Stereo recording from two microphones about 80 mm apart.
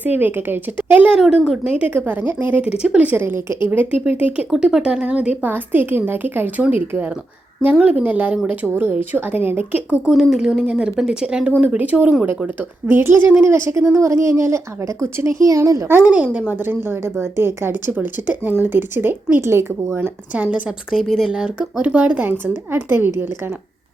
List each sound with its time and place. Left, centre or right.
0.0 s speech: right
1.0 s a woman's voice: centre
2.0 s a woman's voice: right
10.1 s a woman's voice: centre; by 15.9 s right
16.0 s speech: centre
17.9 s speech: right
20.0 s a woman's voice: centre